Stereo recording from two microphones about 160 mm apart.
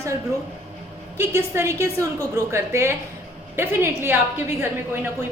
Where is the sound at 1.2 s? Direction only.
15° right (ahead or behind).